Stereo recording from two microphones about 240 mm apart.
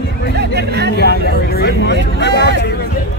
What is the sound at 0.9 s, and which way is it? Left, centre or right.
Speech, left.